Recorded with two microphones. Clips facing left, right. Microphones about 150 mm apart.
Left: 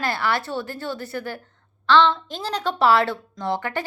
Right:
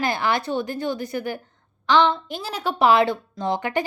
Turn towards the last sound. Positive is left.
turn(degrees=-15)  # may be behind; listen again after turning